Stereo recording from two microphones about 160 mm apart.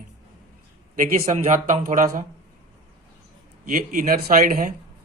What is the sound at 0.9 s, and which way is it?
Speech, 55° right (ahead or behind).